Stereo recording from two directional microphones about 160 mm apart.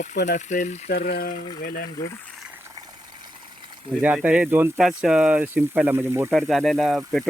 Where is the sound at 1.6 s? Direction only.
65° left (ahead or behind).